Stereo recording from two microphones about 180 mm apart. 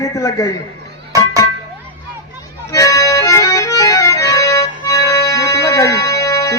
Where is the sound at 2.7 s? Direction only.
20° left (ahead or behind).